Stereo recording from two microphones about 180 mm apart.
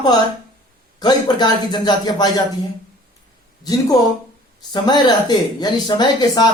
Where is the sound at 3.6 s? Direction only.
20° left (ahead or behind).